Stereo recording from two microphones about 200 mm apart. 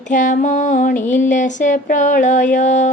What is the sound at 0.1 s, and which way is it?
Mantra, 40° left (ahead or behind).